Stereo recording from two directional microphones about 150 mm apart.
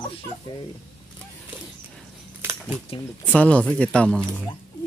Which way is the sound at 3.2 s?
10° left (ahead or behind).